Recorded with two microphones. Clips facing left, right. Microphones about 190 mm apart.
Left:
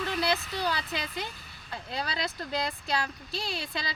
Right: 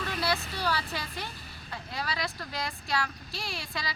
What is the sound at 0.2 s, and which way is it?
Speech, 20° left (ahead or behind).